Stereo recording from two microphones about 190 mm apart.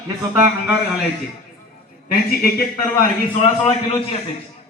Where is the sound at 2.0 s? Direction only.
50° left (ahead or behind).